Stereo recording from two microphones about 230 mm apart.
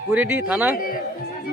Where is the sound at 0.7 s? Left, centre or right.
Left.